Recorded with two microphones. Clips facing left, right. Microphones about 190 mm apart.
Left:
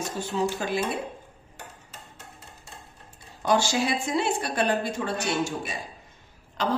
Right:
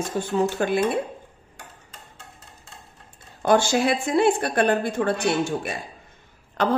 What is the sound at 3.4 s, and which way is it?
Speech, 55° right (ahead or behind).